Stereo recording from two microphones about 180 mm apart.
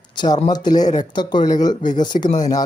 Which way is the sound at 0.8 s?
40° left (ahead or behind).